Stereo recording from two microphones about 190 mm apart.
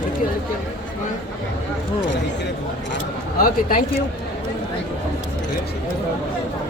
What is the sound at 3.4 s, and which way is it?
Speech, 45° left (ahead or behind).